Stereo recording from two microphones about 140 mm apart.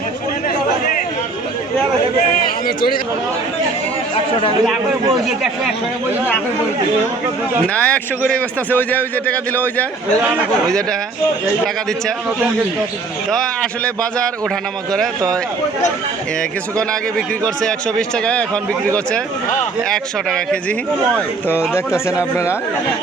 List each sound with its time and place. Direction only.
2.6 s speech: 90° left
7.7 s a man's voice: 10° left (ahead or behind)
13.3 s a man's voice: 5° left (ahead or behind)
16.9 s a man's voice: 5° left (ahead or behind)
21.8 s speech: 20° left (ahead or behind)